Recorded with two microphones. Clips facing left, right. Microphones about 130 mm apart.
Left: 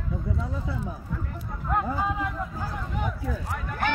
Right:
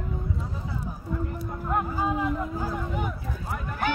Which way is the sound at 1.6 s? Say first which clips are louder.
Even; 5° right (ahead or behind).